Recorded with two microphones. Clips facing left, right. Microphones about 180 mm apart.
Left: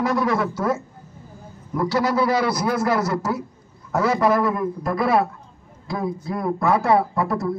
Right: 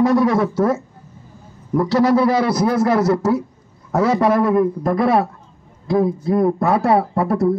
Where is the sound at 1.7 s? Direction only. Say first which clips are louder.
Right 6 dB; 25° right (ahead or behind).